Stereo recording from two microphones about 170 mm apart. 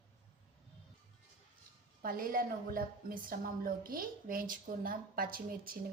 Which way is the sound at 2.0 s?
55° right (ahead or behind).